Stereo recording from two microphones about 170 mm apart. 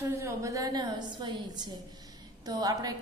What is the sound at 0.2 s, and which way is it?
Mantra, 15° right (ahead or behind).